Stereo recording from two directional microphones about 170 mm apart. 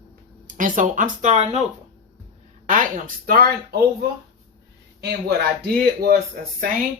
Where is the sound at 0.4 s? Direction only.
50° right (ahead or behind).